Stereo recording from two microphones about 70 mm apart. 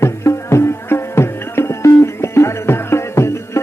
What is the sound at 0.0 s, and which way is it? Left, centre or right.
Music, left.